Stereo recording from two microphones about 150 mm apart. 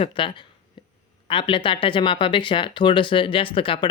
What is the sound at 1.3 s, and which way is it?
Speech, 35° left (ahead or behind).